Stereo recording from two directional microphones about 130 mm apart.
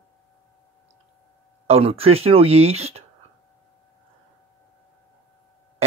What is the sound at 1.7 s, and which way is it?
Speech, 50° right (ahead or behind).